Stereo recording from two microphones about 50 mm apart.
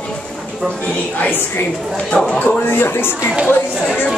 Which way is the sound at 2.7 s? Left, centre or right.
Left.